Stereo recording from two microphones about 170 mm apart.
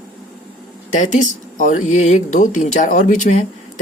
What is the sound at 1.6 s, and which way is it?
Speech, 50° left (ahead or behind).